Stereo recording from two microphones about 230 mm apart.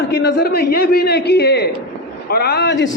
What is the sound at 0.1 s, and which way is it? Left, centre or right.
A man's voice, left.